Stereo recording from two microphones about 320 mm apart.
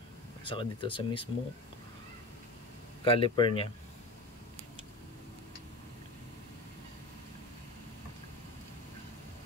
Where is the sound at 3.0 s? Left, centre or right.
Centre.